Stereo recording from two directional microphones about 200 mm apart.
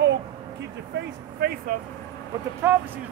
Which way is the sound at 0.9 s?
50° right (ahead or behind).